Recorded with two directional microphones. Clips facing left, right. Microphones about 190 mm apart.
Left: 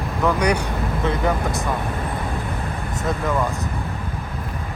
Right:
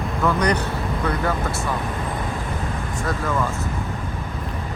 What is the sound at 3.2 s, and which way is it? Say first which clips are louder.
Speech: left 2 dB; 15° left (ahead or behind).